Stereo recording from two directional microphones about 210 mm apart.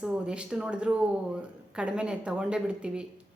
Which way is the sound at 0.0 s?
5° right (ahead or behind).